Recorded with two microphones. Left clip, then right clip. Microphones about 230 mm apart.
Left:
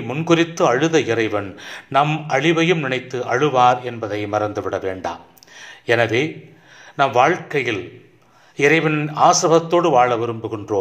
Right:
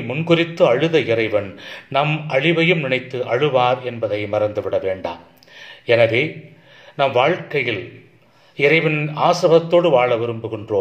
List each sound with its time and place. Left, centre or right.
0.1 s a man's voice: left